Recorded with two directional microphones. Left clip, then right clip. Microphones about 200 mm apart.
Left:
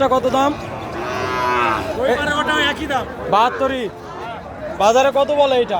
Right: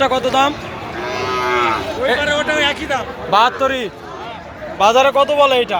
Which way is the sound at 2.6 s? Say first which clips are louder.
Right 2 dB; 75° left (ahead or behind).